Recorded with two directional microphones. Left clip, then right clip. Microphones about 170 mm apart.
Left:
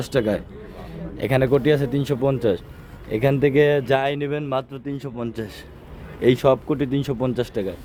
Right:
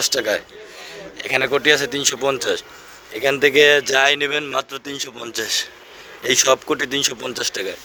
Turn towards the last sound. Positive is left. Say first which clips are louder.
# right 1 dB
turn(degrees=-5)  # may be behind; listen again after turning